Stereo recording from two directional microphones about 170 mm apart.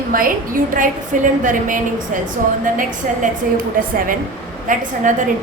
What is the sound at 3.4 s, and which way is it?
A woman's voice, 55° right (ahead or behind).